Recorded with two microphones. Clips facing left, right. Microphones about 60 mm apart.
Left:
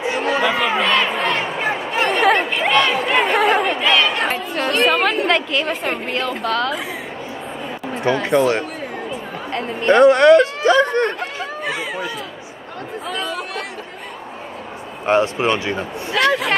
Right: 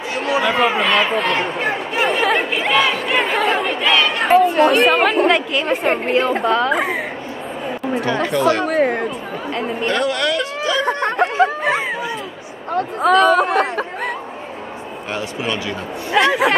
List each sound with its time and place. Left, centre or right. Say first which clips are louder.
0.2 s a sound: right 3 dB; centre
4.6 s speech: right 4 dB; centre
5.9 s a woman's voice: right 6 dB; right
6.7 s a woman's voice: right 7 dB; right
8.0 s speech: left 4 dB; left
8.6 s a sound: right 12 dB; right
9.5 s speech: right 2 dB; centre
9.8 s speech: left 11 dB; left
10.9 s chatter: even; right
12.7 s speech: right 13 dB; right
15.0 s speech: left 8 dB; left
16.3 s speech: even; centre